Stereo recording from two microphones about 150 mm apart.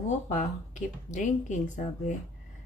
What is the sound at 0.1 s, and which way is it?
A woman's voice, 55° left (ahead or behind).